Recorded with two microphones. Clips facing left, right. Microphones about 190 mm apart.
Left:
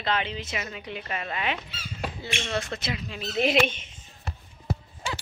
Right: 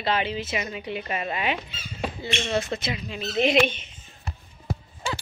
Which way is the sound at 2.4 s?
20° right (ahead or behind).